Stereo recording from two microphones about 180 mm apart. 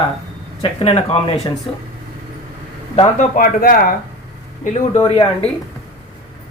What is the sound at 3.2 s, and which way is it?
Speech, 50° left (ahead or behind).